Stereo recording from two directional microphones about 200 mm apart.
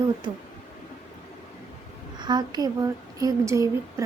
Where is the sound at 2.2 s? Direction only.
20° right (ahead or behind).